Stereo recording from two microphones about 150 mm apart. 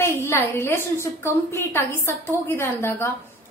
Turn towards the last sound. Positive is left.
turn(degrees=15)  # may be behind; listen again after turning